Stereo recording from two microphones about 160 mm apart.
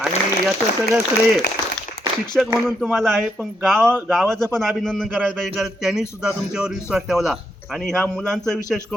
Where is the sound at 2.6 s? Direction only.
Centre (ahead or behind).